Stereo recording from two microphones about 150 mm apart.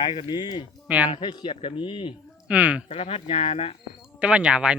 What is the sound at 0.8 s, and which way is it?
Speech, 10° right (ahead or behind).